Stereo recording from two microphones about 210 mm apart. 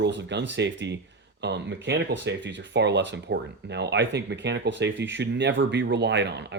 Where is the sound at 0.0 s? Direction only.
55° right (ahead or behind).